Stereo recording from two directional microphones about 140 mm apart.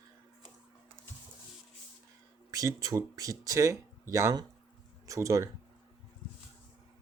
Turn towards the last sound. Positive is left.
turn(degrees=-25)  # may be behind; listen again after turning